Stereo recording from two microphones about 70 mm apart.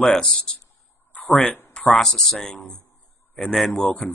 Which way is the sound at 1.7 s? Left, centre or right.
Centre.